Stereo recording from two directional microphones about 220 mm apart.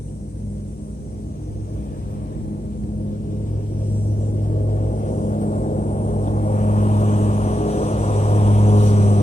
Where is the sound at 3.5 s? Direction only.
40° left (ahead or behind).